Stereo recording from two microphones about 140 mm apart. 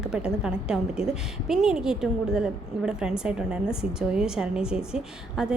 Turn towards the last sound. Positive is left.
turn(degrees=-5)  # may be behind; listen again after turning